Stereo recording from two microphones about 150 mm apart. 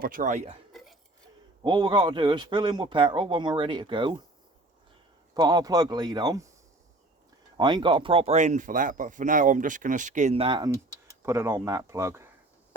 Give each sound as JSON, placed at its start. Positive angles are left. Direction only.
{"t": 0.0, "sound": "speech", "side_deg": -65}
{"t": 1.6, "sound": "a man's voice", "side_deg": -30}
{"t": 5.3, "sound": "speech", "side_deg": -25}
{"t": 7.5, "sound": "speech", "side_deg": -30}
{"t": 11.2, "sound": "speech", "side_deg": -15}